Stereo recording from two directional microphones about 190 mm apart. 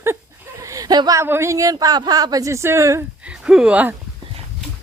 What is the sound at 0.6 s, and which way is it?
A woman's voice, 20° right (ahead or behind).